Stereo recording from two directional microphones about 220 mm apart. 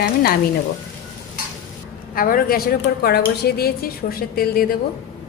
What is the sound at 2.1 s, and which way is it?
Frying, 40° left (ahead or behind).